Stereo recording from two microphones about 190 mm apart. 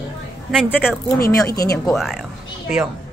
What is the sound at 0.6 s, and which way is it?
Speech, 15° left (ahead or behind).